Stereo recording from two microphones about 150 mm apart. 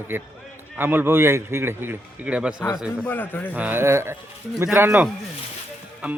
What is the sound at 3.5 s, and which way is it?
A man's voice, 10° right (ahead or behind).